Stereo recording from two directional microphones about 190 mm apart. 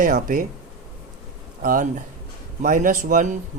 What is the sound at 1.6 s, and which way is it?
Speech, 45° right (ahead or behind).